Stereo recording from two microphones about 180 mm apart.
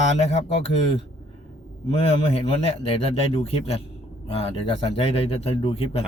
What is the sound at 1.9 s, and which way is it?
A man's voice, 35° left (ahead or behind).